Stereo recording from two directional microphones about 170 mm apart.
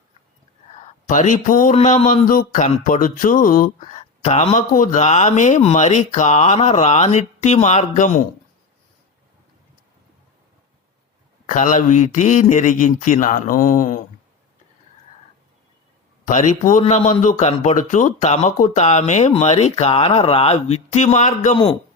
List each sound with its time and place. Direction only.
1.0 s music: 45° left (ahead or behind)
1.7 s music: 40° left (ahead or behind)
11.4 s music: 50° left (ahead or behind)
16.2 s music: 45° left (ahead or behind)